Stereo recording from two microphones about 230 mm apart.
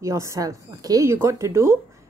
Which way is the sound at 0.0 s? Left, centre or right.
Centre.